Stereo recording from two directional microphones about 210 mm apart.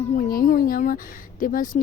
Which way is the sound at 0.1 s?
40° left (ahead or behind).